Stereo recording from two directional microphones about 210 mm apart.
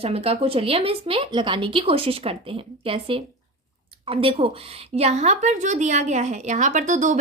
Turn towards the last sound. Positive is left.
turn(degrees=-35)  # may be behind; listen again after turning